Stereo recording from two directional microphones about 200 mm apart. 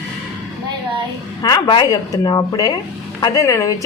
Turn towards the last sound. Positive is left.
turn(degrees=15)  # may be behind; listen again after turning